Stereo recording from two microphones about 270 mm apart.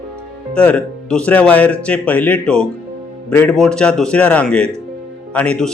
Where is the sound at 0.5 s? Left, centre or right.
Centre.